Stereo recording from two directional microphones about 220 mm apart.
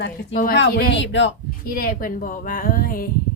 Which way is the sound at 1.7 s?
40° left (ahead or behind).